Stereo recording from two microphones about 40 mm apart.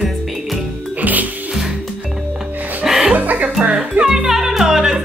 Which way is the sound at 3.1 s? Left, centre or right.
Right.